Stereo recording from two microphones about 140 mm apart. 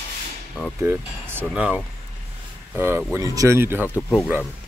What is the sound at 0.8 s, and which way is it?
Speech, 15° right (ahead or behind).